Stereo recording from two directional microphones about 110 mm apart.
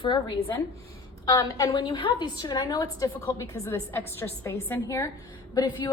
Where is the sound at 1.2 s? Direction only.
35° left (ahead or behind).